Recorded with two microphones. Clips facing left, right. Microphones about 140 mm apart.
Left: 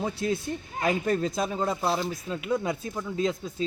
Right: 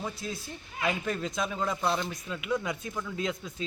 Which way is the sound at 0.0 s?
65° left (ahead or behind).